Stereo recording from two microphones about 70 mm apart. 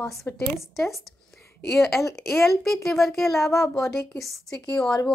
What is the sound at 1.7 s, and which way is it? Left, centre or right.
Speech, centre.